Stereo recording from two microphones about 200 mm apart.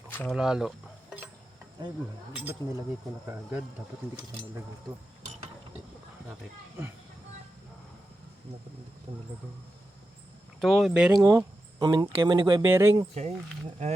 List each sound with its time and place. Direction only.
0.3 s speech: 5° right (ahead or behind)
9.1 s speech: 30° right (ahead or behind)
10.6 s speech: centre (ahead or behind)
11.2 s speech: 15° right (ahead or behind)
12.6 s speech: 10° right (ahead or behind)
13.2 s speech: 35° right (ahead or behind)